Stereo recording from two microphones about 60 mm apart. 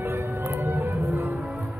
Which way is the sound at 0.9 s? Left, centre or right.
Right.